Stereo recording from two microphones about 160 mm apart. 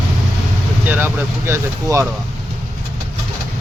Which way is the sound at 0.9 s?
15° right (ahead or behind).